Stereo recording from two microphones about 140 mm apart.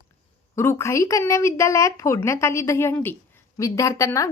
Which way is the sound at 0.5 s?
20° left (ahead or behind).